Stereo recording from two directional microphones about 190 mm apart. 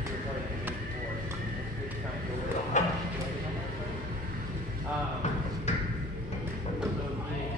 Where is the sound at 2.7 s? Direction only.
40° left (ahead or behind).